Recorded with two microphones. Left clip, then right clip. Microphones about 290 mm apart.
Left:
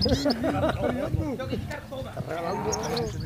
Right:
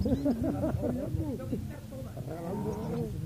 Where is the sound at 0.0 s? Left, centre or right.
Centre.